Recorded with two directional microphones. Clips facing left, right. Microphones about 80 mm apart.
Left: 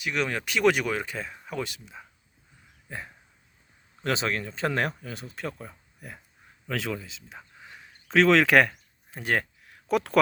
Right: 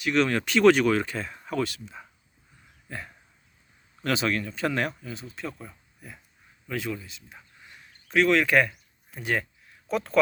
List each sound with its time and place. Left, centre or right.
0.0 s speech: centre
2.9 s a sound: centre
4.0 s speech: left
6.7 s speech: left
9.2 s speech: left
9.6 s a sound: left